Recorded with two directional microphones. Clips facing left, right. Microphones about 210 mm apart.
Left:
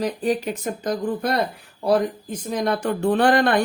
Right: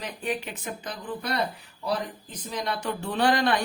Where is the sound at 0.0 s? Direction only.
40° left (ahead or behind).